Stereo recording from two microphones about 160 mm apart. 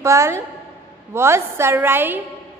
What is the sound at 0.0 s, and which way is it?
A woman's voice, 20° right (ahead or behind).